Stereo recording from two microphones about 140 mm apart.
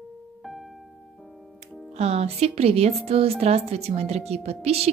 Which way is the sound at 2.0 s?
50° right (ahead or behind).